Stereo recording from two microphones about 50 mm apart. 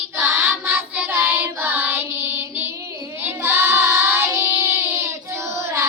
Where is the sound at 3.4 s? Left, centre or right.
Right.